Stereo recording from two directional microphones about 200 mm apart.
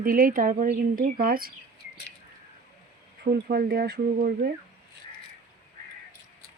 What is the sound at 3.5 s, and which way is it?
Speech, 50° right (ahead or behind).